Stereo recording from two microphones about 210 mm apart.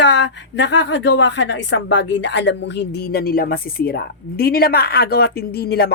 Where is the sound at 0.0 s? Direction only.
55° left (ahead or behind).